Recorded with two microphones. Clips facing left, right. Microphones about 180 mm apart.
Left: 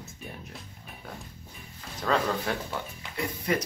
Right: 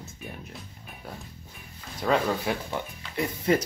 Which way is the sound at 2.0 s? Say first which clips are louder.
Right 2 dB; 15° right (ahead or behind).